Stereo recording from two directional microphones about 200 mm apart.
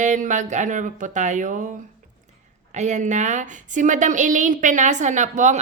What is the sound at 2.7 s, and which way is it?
A woman's voice, 35° right (ahead or behind).